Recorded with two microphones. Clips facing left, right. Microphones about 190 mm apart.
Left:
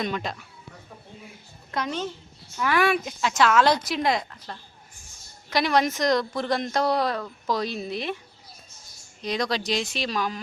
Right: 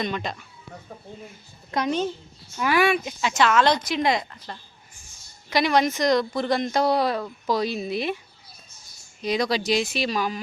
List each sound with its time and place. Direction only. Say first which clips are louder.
0.0 s speech: right 1 dB; centre (ahead or behind)
1.7 s speech: right 5 dB; 15° right (ahead or behind)
2.7 s speech: right 1 dB; centre (ahead or behind)
9.2 s speech: right 3 dB; 5° right (ahead or behind)